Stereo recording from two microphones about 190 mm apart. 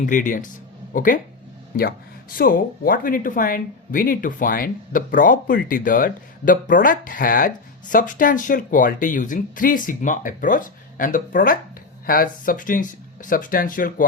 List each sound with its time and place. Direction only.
0.0 s speech: 45° left (ahead or behind)